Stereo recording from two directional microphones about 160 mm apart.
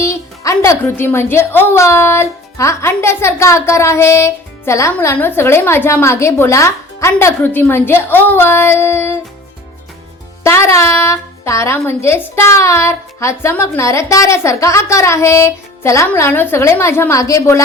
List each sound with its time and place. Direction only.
0.0 s speech: 20° left (ahead or behind)
10.4 s speech: 15° left (ahead or behind)